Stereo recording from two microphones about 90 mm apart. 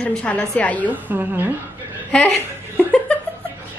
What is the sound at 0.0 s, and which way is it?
Speech, 15° left (ahead or behind).